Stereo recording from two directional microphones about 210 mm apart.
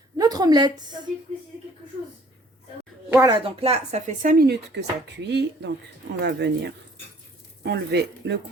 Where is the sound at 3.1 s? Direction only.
15° right (ahead or behind).